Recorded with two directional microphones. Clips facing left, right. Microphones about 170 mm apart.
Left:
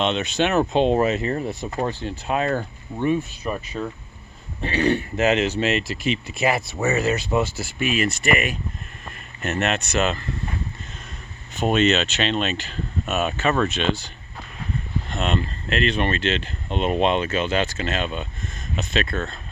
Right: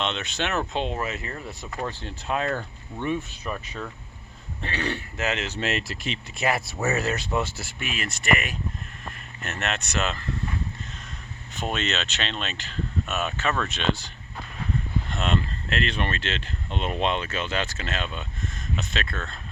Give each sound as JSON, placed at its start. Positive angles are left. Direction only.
{"t": 0.0, "sound": "speech", "side_deg": 15}
{"t": 1.9, "sound": "speech", "side_deg": 10}
{"t": 5.5, "sound": "speech", "side_deg": 0}
{"t": 11.6, "sound": "speech", "side_deg": 10}
{"t": 15.7, "sound": "speech", "side_deg": 5}